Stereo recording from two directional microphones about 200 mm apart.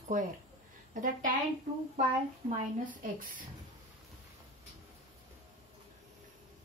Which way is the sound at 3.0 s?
45° right (ahead or behind).